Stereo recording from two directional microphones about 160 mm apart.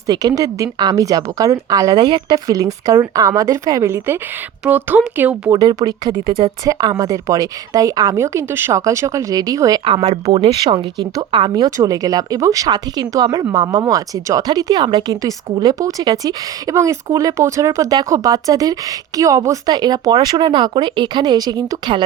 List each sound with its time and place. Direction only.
0.1 s speech: 25° right (ahead or behind)
5.5 s speech: 25° right (ahead or behind)
9.8 s speech: 35° right (ahead or behind)
10.6 s speech: 25° right (ahead or behind)